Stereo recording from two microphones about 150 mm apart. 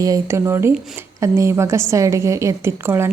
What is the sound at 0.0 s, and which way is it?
A woman's voice, 20° right (ahead or behind).